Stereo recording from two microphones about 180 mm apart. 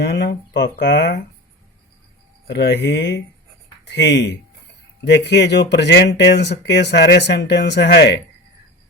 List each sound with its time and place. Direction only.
0.0 s speech: 70° left (ahead or behind)
2.5 s speech: 70° left (ahead or behind)